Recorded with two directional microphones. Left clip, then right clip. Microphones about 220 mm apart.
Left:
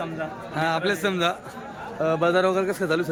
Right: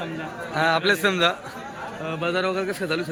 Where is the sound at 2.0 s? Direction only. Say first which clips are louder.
Left 5 dB; 20° left (ahead or behind).